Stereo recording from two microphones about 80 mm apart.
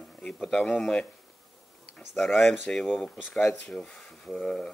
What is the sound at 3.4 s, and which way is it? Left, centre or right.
Speech, left.